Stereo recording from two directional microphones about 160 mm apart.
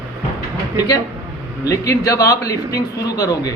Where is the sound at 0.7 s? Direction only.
25° left (ahead or behind).